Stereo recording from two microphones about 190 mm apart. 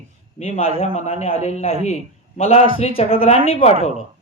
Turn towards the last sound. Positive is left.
turn(degrees=35)  # may be behind; listen again after turning